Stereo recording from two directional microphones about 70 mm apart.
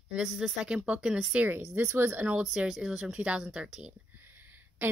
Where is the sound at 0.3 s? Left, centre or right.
Centre.